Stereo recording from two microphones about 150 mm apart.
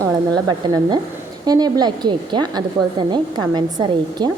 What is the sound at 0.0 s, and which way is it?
A woman's voice, 25° right (ahead or behind).